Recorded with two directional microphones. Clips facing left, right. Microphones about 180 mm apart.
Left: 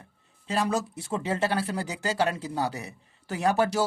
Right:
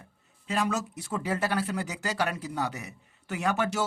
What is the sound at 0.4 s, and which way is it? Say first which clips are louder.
Speech: left 2 dB; 35° left (ahead or behind).